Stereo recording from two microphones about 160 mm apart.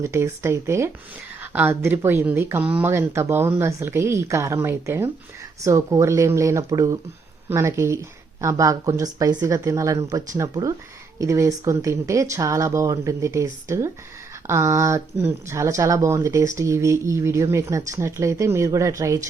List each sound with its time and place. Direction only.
0.0 s speech: 15° right (ahead or behind)